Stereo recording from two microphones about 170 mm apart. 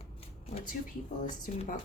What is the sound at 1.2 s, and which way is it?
Speech, 50° left (ahead or behind).